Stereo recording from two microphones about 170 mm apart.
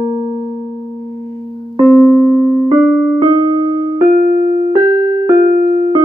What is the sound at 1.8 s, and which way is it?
Keyboard, 5° right (ahead or behind).